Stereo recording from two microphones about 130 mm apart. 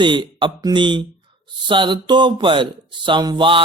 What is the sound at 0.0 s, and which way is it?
Speech, 35° right (ahead or behind).